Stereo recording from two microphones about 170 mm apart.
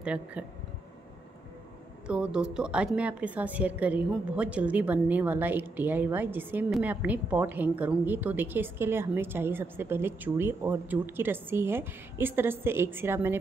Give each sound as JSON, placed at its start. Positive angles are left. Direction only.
{"t": 0.0, "sound": "a woman's voice", "side_deg": -5}
{"t": 2.0, "sound": "a woman's voice", "side_deg": -5}